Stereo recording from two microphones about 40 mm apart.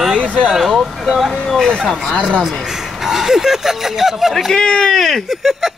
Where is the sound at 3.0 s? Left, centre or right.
Centre.